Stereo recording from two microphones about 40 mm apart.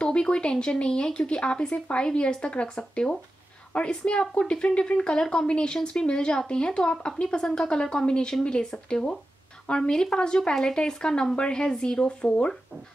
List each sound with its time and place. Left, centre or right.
0.0 s speech: left